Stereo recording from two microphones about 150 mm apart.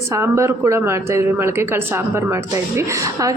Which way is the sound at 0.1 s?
20° right (ahead or behind).